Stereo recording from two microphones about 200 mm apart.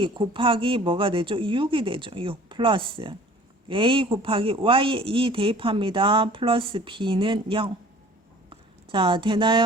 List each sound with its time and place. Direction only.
0.0 s a woman's voice: 25° right (ahead or behind)